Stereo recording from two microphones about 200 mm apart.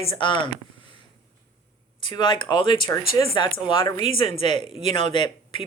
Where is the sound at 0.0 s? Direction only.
25° left (ahead or behind).